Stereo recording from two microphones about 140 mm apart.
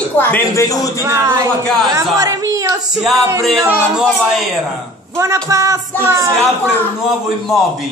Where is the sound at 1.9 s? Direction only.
20° right (ahead or behind).